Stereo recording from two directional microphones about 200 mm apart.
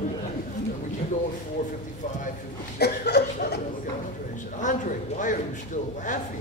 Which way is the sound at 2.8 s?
55° left (ahead or behind).